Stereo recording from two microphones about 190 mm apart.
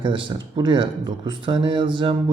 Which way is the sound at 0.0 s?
25° right (ahead or behind).